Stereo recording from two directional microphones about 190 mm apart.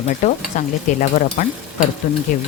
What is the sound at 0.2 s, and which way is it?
Speech, 40° left (ahead or behind).